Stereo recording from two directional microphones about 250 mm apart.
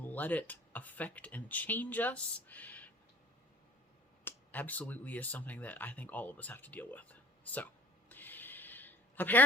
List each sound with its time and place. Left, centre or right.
0.0 s speech: centre
4.2 s speech: centre
8.1 s a sound: centre